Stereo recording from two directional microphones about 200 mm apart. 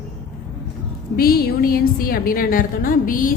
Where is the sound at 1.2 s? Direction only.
50° left (ahead or behind).